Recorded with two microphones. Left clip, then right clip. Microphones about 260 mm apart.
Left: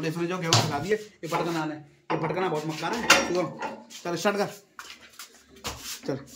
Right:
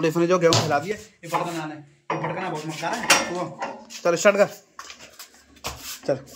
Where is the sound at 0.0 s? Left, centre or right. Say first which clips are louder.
Right 11 dB; centre.